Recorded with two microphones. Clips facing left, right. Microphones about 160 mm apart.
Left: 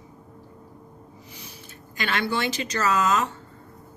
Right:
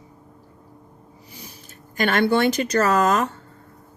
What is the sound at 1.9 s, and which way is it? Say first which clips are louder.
Speech: right 8 dB; 50° right (ahead or behind).